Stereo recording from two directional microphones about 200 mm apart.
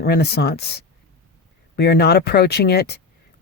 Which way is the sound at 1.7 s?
55° left (ahead or behind).